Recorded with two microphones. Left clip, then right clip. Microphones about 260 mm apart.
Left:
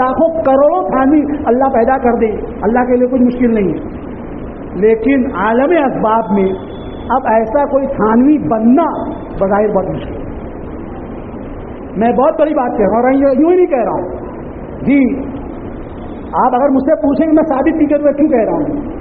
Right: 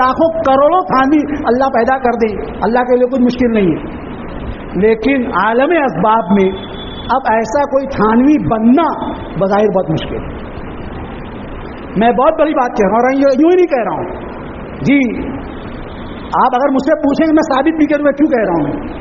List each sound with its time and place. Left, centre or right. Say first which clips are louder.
0.0 s a woman's voice: even; right
4.8 s a man's voice: left 1 dB; right
11.9 s a man's voice: right 1 dB; right
16.3 s a woman's voice: even; right